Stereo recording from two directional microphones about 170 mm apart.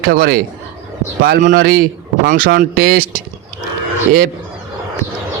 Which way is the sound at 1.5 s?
60° right (ahead or behind).